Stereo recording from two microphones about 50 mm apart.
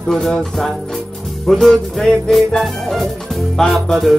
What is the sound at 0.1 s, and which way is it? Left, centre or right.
Music, centre.